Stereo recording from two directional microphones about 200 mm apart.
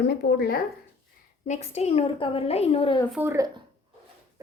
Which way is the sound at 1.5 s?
35° left (ahead or behind).